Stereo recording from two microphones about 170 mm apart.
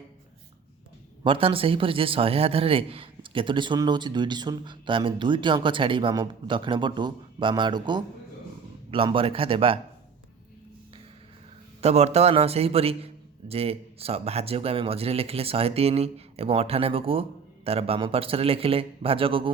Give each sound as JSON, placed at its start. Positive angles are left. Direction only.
{"t": 1.2, "sound": "speech", "side_deg": -30}
{"t": 11.8, "sound": "speech", "side_deg": -40}